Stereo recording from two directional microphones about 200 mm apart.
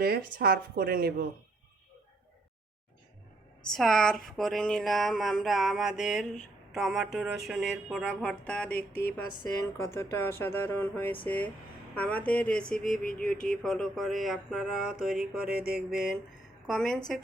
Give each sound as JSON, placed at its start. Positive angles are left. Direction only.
{"t": 0.0, "sound": "speech", "side_deg": -45}
{"t": 3.7, "sound": "music", "side_deg": 0}
{"t": 9.7, "sound": "speech", "side_deg": 15}
{"t": 11.9, "sound": "music", "side_deg": 5}
{"t": 15.4, "sound": "speech", "side_deg": -50}
{"t": 16.6, "sound": "music", "side_deg": 0}